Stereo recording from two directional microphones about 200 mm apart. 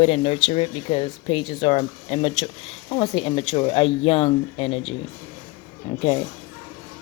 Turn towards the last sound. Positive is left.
turn(degrees=25)  # may be behind; listen again after turning